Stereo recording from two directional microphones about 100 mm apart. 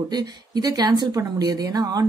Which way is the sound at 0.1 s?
40° right (ahead or behind).